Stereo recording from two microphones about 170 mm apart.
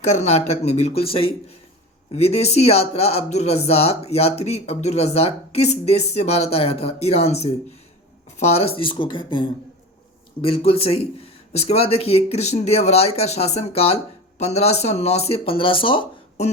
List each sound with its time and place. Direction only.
0.0 s speech: 40° left (ahead or behind)